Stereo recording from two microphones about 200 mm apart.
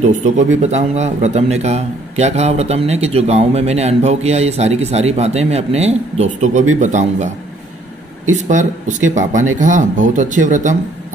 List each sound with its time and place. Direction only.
0.0 s speech: 35° right (ahead or behind)